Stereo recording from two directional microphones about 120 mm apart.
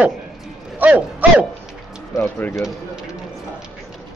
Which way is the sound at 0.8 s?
15° right (ahead or behind).